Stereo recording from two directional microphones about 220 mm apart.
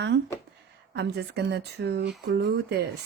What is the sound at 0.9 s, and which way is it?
Speech, 50° right (ahead or behind).